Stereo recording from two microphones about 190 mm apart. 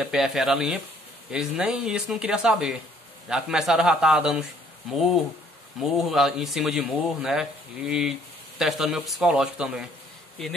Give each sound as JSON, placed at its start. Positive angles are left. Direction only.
{"t": 0.0, "sound": "a man's voice", "side_deg": 0}